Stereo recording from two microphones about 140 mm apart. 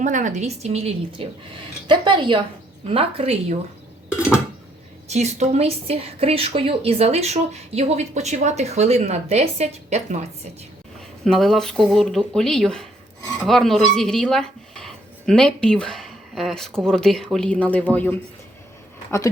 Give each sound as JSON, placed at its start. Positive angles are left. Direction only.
{"t": 0.0, "sound": "a woman's voice", "side_deg": -65}
{"t": 5.0, "sound": "a woman's voice", "side_deg": -55}
{"t": 11.3, "sound": "speech", "side_deg": 5}